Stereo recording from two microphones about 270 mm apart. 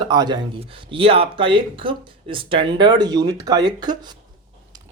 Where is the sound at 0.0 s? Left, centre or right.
Centre.